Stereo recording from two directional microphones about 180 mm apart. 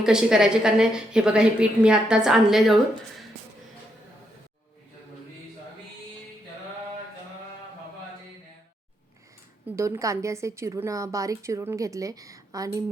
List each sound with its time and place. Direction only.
0.0 s a woman's voice: 5° right (ahead or behind)
9.6 s a woman's voice: 15° right (ahead or behind)